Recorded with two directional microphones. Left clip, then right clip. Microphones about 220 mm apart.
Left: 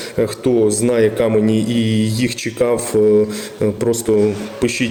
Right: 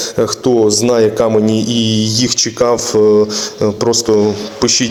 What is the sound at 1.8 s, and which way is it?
Speech, 15° left (ahead or behind).